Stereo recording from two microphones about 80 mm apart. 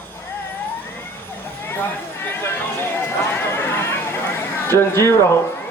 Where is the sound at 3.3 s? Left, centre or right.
Left.